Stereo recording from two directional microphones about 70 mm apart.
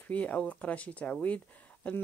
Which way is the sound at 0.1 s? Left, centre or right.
Centre.